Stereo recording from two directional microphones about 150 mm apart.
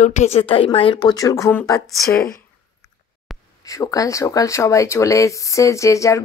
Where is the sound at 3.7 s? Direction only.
25° left (ahead or behind).